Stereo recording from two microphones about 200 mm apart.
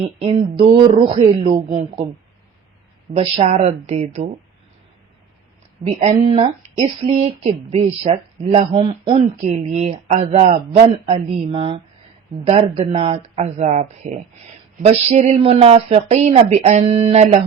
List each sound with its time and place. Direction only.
0.2 s speech: 30° right (ahead or behind)
3.2 s speech: 30° right (ahead or behind)
6.2 s speech: 30° right (ahead or behind)